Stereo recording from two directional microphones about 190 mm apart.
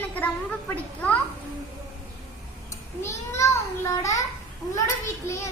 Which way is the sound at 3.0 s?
15° left (ahead or behind).